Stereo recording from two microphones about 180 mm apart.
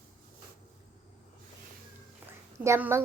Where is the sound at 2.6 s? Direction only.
15° right (ahead or behind).